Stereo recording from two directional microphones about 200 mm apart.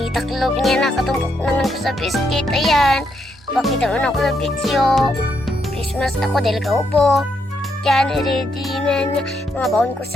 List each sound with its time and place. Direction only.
0.0 s speech: centre (ahead or behind)